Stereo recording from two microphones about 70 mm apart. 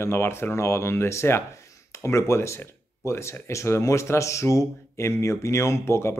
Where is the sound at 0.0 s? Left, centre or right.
Left.